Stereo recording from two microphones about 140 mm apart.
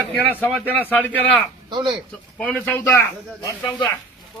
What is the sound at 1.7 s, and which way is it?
Speech, 35° right (ahead or behind).